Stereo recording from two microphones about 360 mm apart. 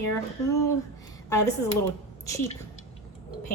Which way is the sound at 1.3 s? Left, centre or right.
Centre.